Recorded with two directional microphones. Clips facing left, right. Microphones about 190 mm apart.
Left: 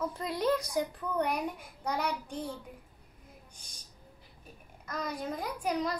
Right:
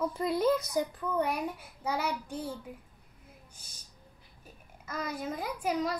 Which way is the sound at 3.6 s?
5° right (ahead or behind).